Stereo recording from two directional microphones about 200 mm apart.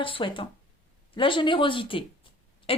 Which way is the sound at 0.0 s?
25° left (ahead or behind).